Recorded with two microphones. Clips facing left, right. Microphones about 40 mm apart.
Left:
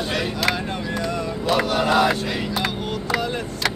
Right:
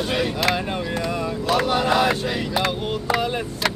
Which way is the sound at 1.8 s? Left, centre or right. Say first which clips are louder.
Left 1 dB; centre.